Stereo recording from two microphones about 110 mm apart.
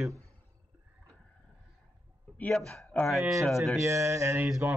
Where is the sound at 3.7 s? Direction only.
25° right (ahead or behind).